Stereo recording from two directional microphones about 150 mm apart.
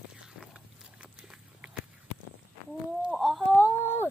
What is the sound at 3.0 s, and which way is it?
Chicken, centre (ahead or behind).